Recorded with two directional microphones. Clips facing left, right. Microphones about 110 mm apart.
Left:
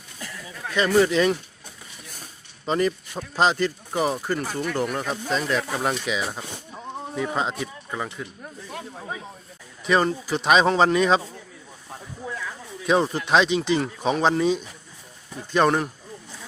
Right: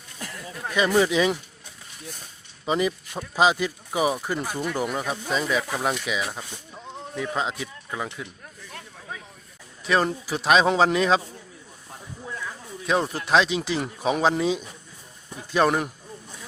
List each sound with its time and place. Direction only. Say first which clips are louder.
0.7 s speech: left 1 dB; 10° right (ahead or behind)
2.6 s speech: left 1 dB; 5° right (ahead or behind)
8.7 s snake: left 5 dB; 15° left (ahead or behind)
9.8 s speech: left 2 dB; centre (ahead or behind)
12.8 s speech: left 3 dB; centre (ahead or behind)